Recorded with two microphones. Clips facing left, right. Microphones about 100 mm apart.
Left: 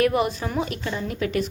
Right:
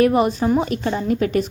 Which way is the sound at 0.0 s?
35° right (ahead or behind).